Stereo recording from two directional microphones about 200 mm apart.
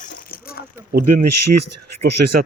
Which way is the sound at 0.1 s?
50° left (ahead or behind).